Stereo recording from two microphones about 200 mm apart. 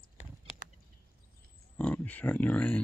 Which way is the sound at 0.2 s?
35° left (ahead or behind).